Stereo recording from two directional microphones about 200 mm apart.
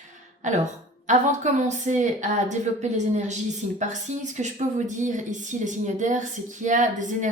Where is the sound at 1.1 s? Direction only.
35° right (ahead or behind).